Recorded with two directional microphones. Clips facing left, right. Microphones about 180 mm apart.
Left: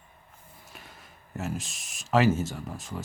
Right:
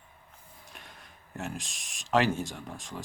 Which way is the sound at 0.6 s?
5° left (ahead or behind).